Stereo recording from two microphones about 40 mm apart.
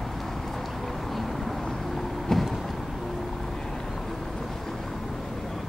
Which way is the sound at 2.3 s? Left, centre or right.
Centre.